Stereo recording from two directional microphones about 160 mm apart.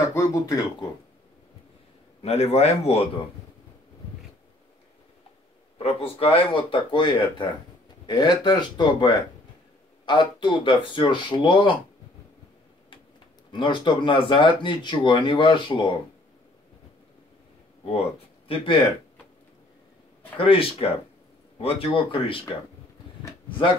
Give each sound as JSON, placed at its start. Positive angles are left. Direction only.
{"t": 0.1, "sound": "speech", "side_deg": 20}
{"t": 2.2, "sound": "speech", "side_deg": 40}
{"t": 5.8, "sound": "speech", "side_deg": 35}
{"t": 13.5, "sound": "speech", "side_deg": 30}
{"t": 18.5, "sound": "speech", "side_deg": 30}
{"t": 20.3, "sound": "speech", "side_deg": 35}